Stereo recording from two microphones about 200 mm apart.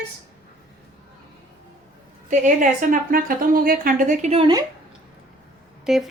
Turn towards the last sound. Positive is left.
turn(degrees=-5)  # may be behind; listen again after turning